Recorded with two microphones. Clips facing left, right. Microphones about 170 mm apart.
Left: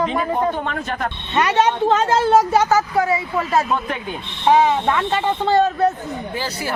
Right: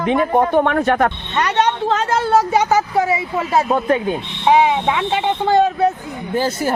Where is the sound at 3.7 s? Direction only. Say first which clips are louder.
Right 7 dB; 40° right (ahead or behind).